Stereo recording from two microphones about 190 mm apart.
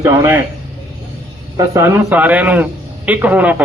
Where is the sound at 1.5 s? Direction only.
15° right (ahead or behind).